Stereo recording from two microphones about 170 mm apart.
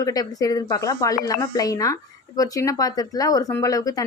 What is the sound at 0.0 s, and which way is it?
Speech, 20° left (ahead or behind).